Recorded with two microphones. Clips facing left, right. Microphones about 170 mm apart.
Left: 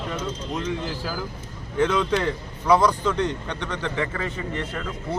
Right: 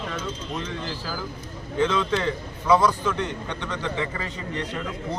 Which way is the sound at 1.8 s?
15° left (ahead or behind).